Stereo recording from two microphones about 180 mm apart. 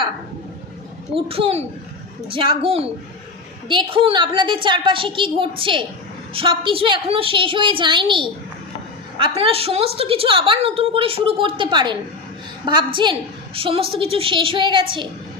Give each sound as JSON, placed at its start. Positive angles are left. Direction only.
{"t": 1.1, "sound": "a woman's voice", "side_deg": -30}